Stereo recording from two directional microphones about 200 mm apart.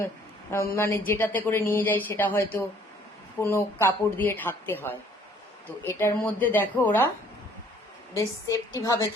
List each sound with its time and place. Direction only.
0.5 s speech: 15° left (ahead or behind)
8.1 s speech: 15° left (ahead or behind)